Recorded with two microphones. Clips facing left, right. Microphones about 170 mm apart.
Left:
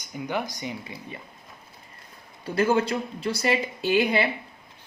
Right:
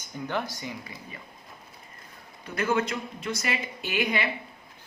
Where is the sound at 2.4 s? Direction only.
30° left (ahead or behind).